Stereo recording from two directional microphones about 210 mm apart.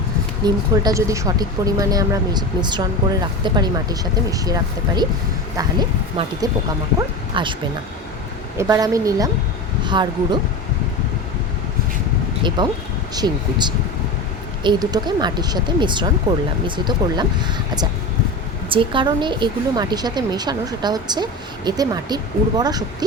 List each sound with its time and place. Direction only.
0.4 s speech: 20° right (ahead or behind)
6.2 s a woman's voice: 25° right (ahead or behind)
7.3 s a woman's voice: 25° right (ahead or behind)
8.5 s speech: 15° right (ahead or behind)
9.8 s a sound: 20° right (ahead or behind)
12.4 s a woman's voice: 20° right (ahead or behind)
18.7 s a woman's voice: 25° right (ahead or behind)